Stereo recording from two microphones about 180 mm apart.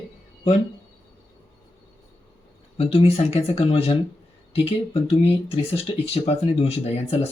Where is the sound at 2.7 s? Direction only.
35° left (ahead or behind).